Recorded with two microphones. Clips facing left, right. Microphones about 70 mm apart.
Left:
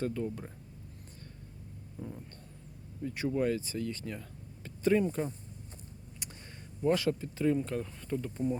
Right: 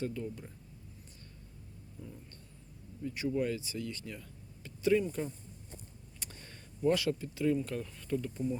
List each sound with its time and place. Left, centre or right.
0.0 s speech: left
2.0 s speech: left
6.2 s a sound: centre
6.8 s speech: left